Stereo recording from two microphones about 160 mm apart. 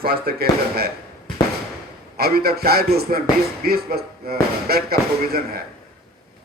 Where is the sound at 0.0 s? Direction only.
70° right (ahead or behind).